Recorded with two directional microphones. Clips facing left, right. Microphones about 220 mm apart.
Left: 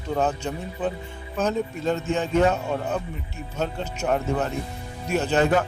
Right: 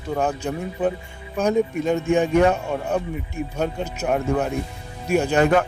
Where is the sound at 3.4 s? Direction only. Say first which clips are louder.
Right 3 dB; 10° right (ahead or behind).